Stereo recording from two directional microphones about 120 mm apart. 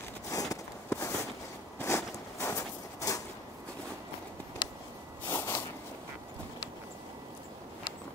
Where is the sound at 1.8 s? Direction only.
25° left (ahead or behind).